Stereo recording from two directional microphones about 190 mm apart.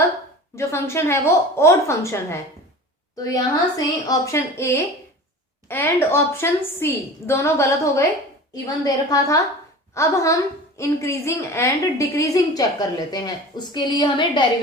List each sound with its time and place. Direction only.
0.5 s a woman's voice: 15° left (ahead or behind)